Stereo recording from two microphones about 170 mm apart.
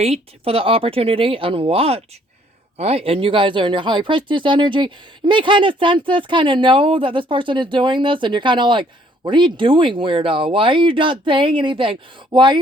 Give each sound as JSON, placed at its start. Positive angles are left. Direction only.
{"t": 0.0, "sound": "speech", "side_deg": -35}